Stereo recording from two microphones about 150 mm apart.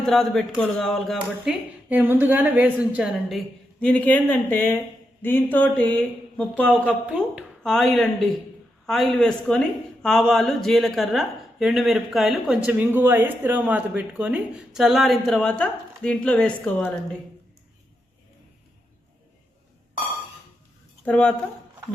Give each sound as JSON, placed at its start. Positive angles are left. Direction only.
{"t": 0.0, "sound": "speech", "side_deg": 5}
{"t": 1.9, "sound": "speech", "side_deg": -15}
{"t": 6.8, "sound": "speech", "side_deg": -10}
{"t": 7.6, "sound": "speech", "side_deg": 0}
{"t": 21.0, "sound": "speech", "side_deg": 10}